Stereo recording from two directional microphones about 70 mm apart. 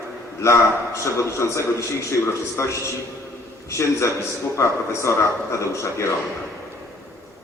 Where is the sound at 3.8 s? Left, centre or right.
Left.